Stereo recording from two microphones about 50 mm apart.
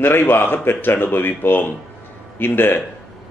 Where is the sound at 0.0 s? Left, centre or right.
Left.